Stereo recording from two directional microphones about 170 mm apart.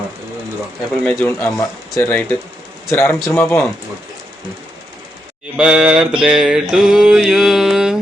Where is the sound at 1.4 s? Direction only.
15° left (ahead or behind).